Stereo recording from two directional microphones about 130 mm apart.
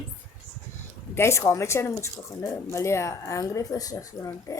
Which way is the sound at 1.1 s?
20° left (ahead or behind).